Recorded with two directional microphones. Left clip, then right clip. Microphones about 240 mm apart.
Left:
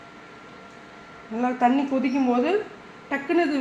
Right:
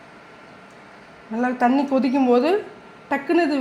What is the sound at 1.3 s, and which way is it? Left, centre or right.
A woman's voice, right.